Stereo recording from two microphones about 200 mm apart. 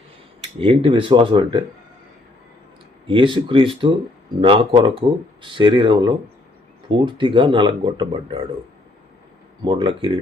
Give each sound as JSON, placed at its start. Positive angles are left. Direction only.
{"t": 0.6, "sound": "speech", "side_deg": -25}
{"t": 3.1, "sound": "speech", "side_deg": -25}
{"t": 9.6, "sound": "speech", "side_deg": -25}